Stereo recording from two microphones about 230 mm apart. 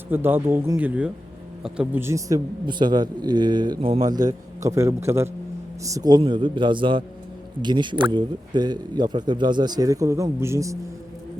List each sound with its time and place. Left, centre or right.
0.1 s a man's voice: centre